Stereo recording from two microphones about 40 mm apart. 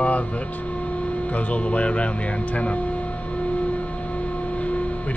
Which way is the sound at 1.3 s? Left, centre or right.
Left.